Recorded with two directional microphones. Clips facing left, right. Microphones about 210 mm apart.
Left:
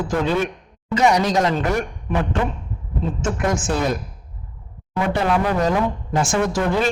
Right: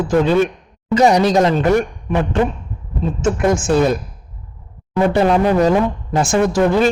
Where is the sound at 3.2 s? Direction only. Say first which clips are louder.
Right 7 dB; 25° right (ahead or behind).